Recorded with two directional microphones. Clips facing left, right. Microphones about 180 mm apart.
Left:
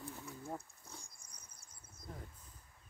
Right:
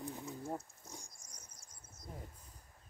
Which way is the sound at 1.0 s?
55° left (ahead or behind).